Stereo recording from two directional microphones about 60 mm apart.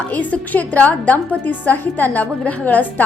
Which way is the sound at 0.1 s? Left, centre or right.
Left.